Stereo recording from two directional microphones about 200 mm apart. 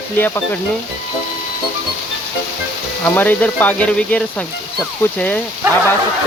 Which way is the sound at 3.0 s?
10° left (ahead or behind).